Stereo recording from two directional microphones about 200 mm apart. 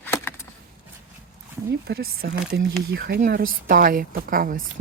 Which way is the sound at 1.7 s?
55° right (ahead or behind).